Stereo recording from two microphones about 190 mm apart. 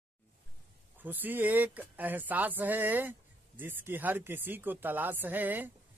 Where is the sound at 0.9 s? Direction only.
10° right (ahead or behind).